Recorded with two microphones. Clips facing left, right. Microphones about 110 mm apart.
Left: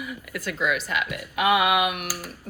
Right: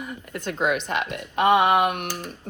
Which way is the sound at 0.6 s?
45° right (ahead or behind).